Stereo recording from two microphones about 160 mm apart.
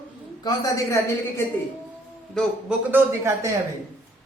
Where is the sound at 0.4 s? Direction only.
20° left (ahead or behind).